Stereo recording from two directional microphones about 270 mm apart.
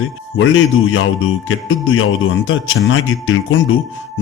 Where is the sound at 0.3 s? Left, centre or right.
Left.